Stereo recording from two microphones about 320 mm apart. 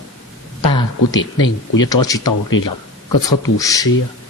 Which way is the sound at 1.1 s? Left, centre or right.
Left.